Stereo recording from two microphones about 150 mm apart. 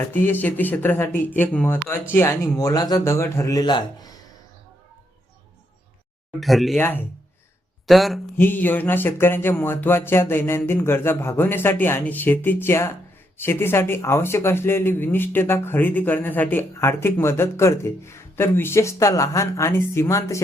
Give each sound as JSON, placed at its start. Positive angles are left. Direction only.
{"t": 0.0, "sound": "a man's voice", "side_deg": 15}
{"t": 6.4, "sound": "speech", "side_deg": 0}
{"t": 6.7, "sound": "speech", "side_deg": 15}
{"t": 7.9, "sound": "speech", "side_deg": 0}
{"t": 8.4, "sound": "speech", "side_deg": 15}